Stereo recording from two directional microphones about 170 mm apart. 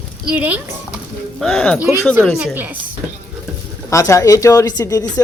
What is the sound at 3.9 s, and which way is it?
Speech, 20° left (ahead or behind).